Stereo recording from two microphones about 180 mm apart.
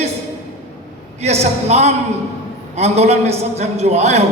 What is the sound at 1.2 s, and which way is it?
A man's voice, 35° right (ahead or behind).